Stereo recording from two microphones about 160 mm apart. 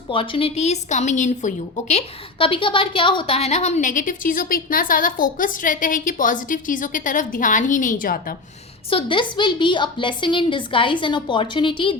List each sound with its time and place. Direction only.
0.1 s a woman's voice: 35° left (ahead or behind); by 8.4 s 65° left (ahead or behind)
8.9 s a woman's voice: 35° left (ahead or behind)